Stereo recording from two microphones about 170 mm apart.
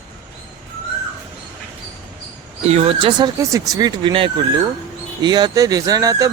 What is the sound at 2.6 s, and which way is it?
Speech, 35° right (ahead or behind).